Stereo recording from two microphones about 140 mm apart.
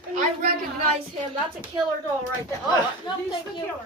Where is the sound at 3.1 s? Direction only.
35° left (ahead or behind).